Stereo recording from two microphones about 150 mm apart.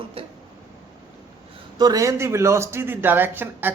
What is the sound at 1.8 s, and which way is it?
Speech, 25° right (ahead or behind).